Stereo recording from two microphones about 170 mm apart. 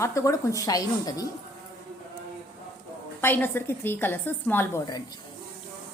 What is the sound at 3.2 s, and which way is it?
A woman's voice, 10° left (ahead or behind).